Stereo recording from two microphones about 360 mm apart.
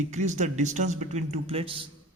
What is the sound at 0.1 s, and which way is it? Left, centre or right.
A man's voice, centre.